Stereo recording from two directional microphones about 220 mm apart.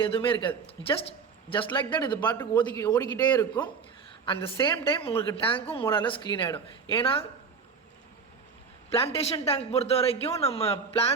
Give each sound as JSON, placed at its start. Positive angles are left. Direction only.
{"t": 0.0, "sound": "a man's voice", "side_deg": 25}
{"t": 8.9, "sound": "a man's voice", "side_deg": 25}